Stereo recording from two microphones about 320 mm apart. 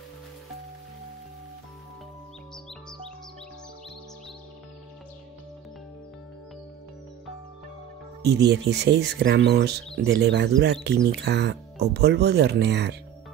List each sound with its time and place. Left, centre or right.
8.5 s speech: right